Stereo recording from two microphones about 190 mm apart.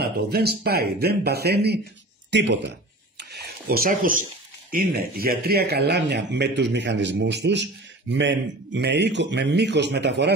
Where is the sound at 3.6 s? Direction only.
50° right (ahead or behind).